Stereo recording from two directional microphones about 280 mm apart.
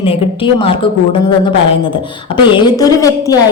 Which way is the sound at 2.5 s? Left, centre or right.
Centre.